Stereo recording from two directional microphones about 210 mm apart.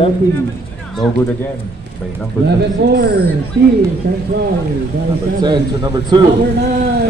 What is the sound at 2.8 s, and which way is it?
Speech, 50° right (ahead or behind).